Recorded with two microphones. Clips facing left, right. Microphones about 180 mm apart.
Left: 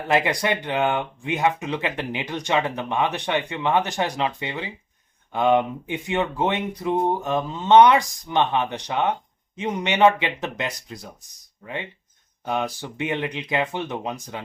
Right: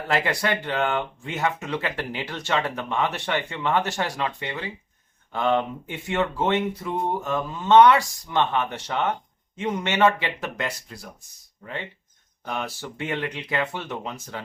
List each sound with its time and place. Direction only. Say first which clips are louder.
0.1 s speech: left 3 dB; 20° left (ahead or behind)